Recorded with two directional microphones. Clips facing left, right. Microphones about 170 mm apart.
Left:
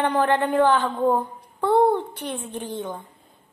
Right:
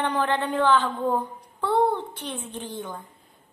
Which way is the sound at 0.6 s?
15° left (ahead or behind).